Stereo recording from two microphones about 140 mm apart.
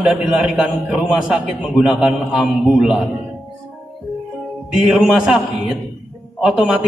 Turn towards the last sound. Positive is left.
turn(degrees=-5)  # may be behind; listen again after turning